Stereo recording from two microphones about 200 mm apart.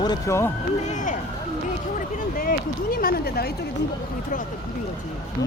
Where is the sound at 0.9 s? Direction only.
40° left (ahead or behind).